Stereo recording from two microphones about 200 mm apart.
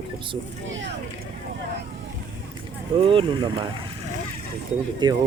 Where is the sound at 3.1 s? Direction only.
25° right (ahead or behind).